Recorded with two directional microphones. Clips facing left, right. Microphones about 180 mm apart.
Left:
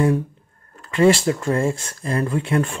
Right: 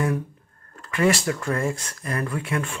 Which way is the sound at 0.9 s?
30° left (ahead or behind).